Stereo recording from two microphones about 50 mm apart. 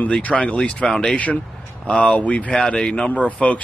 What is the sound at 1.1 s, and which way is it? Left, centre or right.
Speech, left.